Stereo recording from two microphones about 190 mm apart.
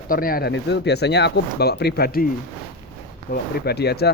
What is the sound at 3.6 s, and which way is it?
Speech, 60° left (ahead or behind).